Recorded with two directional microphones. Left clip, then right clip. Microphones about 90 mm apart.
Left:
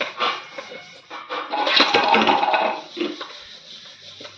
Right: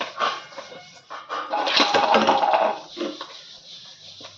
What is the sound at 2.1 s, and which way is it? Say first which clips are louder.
Music: left 1 dB; 20° right (ahead or behind).